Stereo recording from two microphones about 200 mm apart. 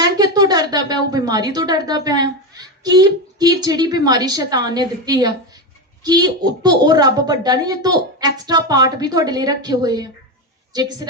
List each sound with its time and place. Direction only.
0.0 s a woman's voice: 20° right (ahead or behind)